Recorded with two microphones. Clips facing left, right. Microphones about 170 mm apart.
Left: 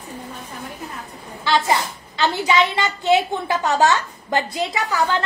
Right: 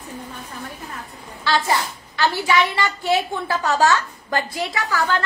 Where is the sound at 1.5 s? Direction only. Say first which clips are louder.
Left 1 dB; 20° left (ahead or behind).